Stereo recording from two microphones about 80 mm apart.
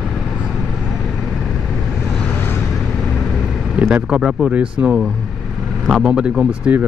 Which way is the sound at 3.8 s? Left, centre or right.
Centre.